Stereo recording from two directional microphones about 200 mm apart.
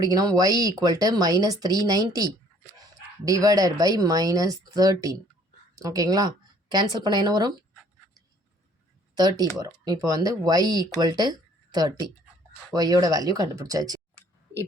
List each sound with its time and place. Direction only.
0.0 s speech: 20° right (ahead or behind)
9.1 s speech: 20° right (ahead or behind)